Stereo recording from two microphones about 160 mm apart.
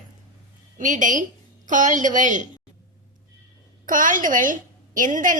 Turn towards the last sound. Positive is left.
turn(degrees=-55)  # may be behind; listen again after turning